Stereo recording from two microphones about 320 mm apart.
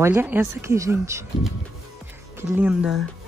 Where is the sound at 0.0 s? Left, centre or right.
Centre.